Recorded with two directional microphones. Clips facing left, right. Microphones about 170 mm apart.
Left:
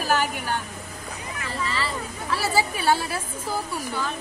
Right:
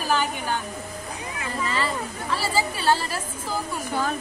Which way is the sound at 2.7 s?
10° left (ahead or behind).